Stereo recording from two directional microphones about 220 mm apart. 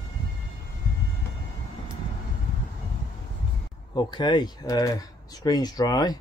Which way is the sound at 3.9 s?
20° left (ahead or behind).